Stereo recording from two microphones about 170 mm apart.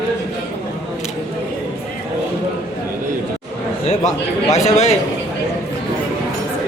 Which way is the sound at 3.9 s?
40° left (ahead or behind).